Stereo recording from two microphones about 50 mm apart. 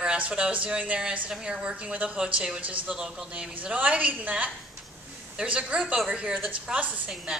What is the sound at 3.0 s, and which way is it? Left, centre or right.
Speech, centre.